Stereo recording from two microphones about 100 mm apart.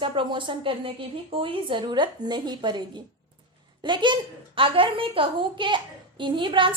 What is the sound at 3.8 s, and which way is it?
A woman's voice, 50° right (ahead or behind).